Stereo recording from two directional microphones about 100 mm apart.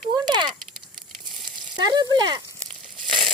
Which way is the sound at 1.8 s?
45° right (ahead or behind).